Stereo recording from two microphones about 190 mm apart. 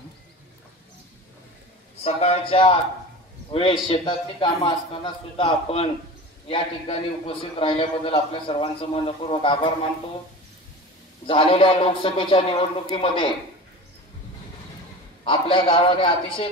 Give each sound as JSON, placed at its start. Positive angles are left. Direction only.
{"t": 2.0, "sound": "a man's voice", "side_deg": 30}
{"t": 11.2, "sound": "a man's voice", "side_deg": 30}
{"t": 15.2, "sound": "a man's voice", "side_deg": 30}